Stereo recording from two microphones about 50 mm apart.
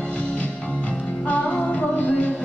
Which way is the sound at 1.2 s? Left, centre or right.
Left.